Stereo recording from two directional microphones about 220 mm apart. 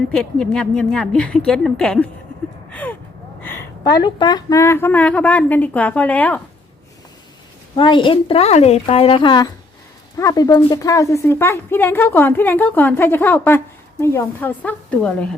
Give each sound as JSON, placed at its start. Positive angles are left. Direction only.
{"t": 0.1, "sound": "a woman's voice", "side_deg": 5}
{"t": 2.6, "sound": "gasp", "side_deg": 5}
{"t": 3.4, "sound": "a woman's voice", "side_deg": 15}
{"t": 7.8, "sound": "a woman's voice", "side_deg": 20}